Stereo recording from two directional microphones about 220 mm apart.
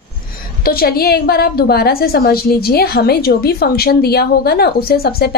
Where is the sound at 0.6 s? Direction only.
45° left (ahead or behind).